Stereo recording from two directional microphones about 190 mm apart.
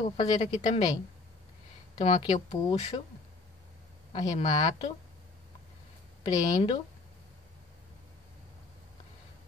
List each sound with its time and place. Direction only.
0.0 s a woman's voice: 25° left (ahead or behind)
2.0 s speech: 30° left (ahead or behind)
4.1 s a woman's voice: 25° left (ahead or behind)
6.2 s a woman's voice: 30° left (ahead or behind)